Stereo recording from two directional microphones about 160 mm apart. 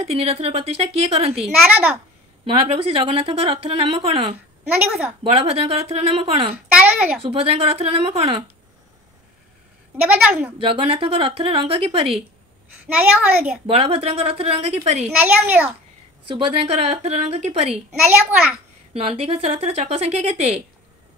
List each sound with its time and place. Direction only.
0.0 s a woman's voice: 40° right (ahead or behind)
1.3 s a woman's voice: 5° right (ahead or behind)
2.4 s a woman's voice: 35° right (ahead or behind)
4.6 s a woman's voice: 10° right (ahead or behind)
5.4 s a woman's voice: 40° right (ahead or behind)
6.5 s a woman's voice: 10° right (ahead or behind)
7.2 s a woman's voice: 35° right (ahead or behind)
10.0 s a woman's voice: 10° right (ahead or behind)
10.6 s a woman's voice: 35° right (ahead or behind)
12.8 s a woman's voice: 5° right (ahead or behind)
13.7 s a woman's voice: 40° right (ahead or behind)
15.0 s a woman's voice: 10° right (ahead or behind)
16.3 s a woman's voice: 35° right (ahead or behind)
18.9 s a woman's voice: 35° right (ahead or behind)